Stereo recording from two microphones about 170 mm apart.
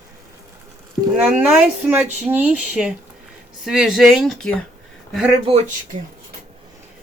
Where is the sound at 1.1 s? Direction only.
10° right (ahead or behind).